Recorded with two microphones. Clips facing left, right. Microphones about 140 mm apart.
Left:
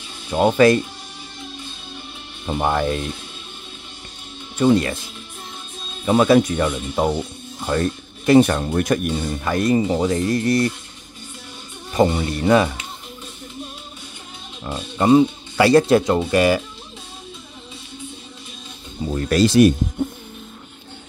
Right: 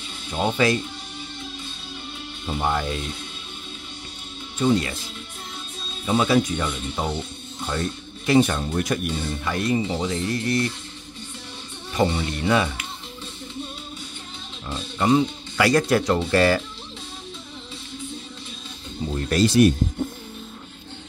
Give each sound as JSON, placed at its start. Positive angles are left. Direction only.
{"t": 0.3, "sound": "speech", "side_deg": 50}
{"t": 2.4, "sound": "speech", "side_deg": 50}
{"t": 4.6, "sound": "speech", "side_deg": 50}
{"t": 6.0, "sound": "speech", "side_deg": 50}
{"t": 11.9, "sound": "speech", "side_deg": 40}
{"t": 14.7, "sound": "speech", "side_deg": 35}
{"t": 19.2, "sound": "speech", "side_deg": 90}